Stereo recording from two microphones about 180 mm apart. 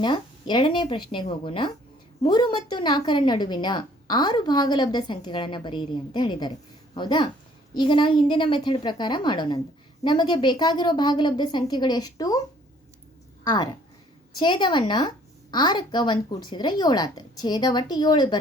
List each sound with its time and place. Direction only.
0.0 s a woman's voice: 25° left (ahead or behind)
13.4 s a woman's voice: 20° left (ahead or behind)